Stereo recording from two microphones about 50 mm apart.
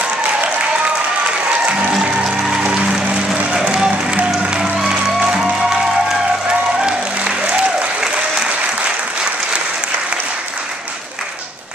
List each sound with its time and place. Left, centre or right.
1.7 s music: centre
3.6 s music: centre
6.8 s applause: centre